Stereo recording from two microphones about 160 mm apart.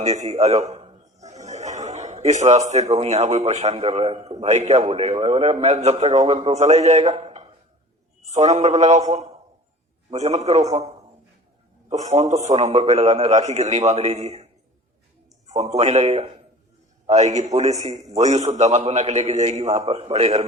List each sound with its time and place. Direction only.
0.0 s a man's voice: 45° right (ahead or behind)
1.2 s chuckle: 45° right (ahead or behind)
3.0 s a man's voice: 45° right (ahead or behind)
11.9 s a man's voice: 45° right (ahead or behind)
15.5 s a man's voice: 45° right (ahead or behind)
17.9 s a man's voice: 20° right (ahead or behind)
18.2 s a man's voice: 45° right (ahead or behind)